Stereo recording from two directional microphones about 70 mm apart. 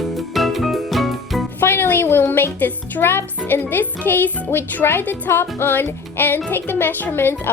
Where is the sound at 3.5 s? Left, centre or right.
Left.